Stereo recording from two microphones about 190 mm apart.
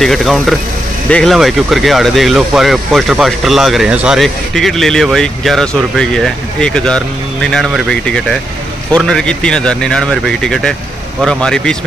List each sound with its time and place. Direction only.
0.0 s speech: centre (ahead or behind)